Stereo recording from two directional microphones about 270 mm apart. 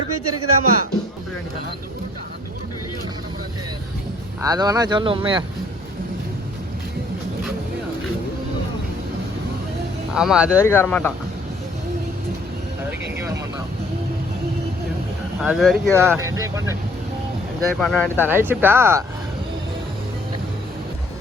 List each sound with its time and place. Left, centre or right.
0.1 s speech: right
4.4 s speech: centre
10.2 s speech: centre
10.6 s speech: centre
15.4 s speech: centre
16.0 s speech: centre
17.7 s speech: centre
18.2 s speech: centre